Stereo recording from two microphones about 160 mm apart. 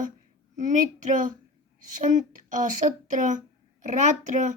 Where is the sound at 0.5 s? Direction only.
50° right (ahead or behind).